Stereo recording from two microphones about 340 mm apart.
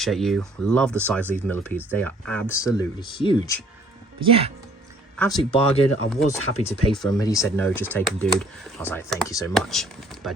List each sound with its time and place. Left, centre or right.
0.0 s speech: centre
4.2 s speech: centre
5.1 s speech: centre
5.4 s speech: centre
7.0 s speech: centre